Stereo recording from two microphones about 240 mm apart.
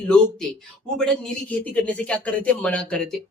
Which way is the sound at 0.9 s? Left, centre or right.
Centre.